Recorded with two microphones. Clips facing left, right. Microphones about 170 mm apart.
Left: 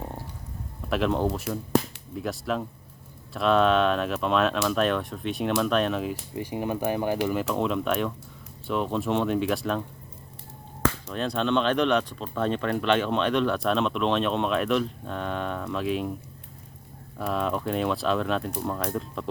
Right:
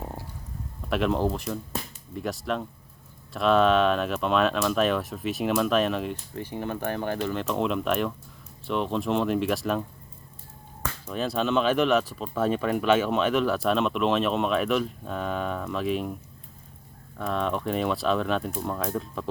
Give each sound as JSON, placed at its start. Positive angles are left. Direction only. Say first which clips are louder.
{"t": 0.9, "sound": "speech", "louder": "even", "side_deg": 0}
{"t": 1.7, "sound": "music", "louder": "left 11 dB", "side_deg": 75}
{"t": 2.1, "sound": "speech", "louder": "even", "side_deg": 0}
{"t": 6.3, "sound": "speech", "louder": "left 3 dB", "side_deg": 10}
{"t": 11.0, "sound": "speech", "louder": "even", "side_deg": -5}
{"t": 17.2, "sound": "speech", "louder": "even", "side_deg": 5}